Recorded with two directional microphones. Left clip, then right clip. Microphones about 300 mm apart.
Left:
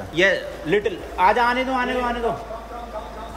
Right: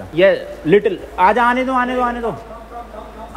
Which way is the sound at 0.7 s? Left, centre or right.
Centre.